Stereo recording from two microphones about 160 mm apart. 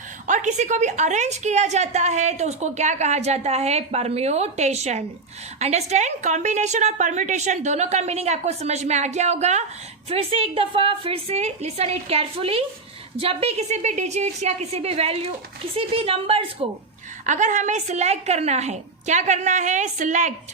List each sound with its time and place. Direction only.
0.3 s a woman's voice: 50° right (ahead or behind)
17.2 s a woman's voice: 50° right (ahead or behind)